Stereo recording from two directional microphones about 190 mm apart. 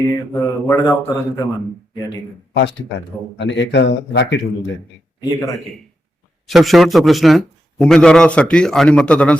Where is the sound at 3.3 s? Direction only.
70° left (ahead or behind).